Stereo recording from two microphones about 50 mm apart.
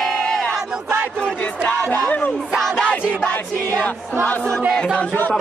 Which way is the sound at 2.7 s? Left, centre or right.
Centre.